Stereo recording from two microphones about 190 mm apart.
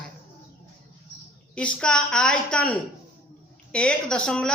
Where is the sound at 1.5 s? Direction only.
5° left (ahead or behind).